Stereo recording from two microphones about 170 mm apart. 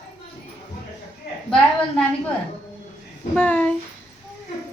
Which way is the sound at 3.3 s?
10° left (ahead or behind).